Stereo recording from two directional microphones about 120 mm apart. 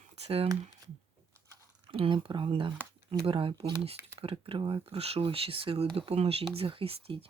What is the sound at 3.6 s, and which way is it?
Speech, 55° right (ahead or behind).